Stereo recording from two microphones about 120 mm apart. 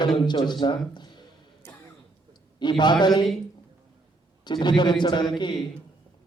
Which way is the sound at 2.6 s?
40° left (ahead or behind).